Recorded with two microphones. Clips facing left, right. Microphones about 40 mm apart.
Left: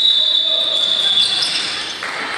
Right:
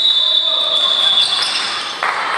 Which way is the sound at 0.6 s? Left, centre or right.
Right.